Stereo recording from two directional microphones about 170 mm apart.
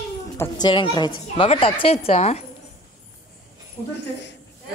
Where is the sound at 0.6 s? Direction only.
30° left (ahead or behind).